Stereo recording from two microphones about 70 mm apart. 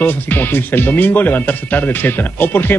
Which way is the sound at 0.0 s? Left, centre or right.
Left.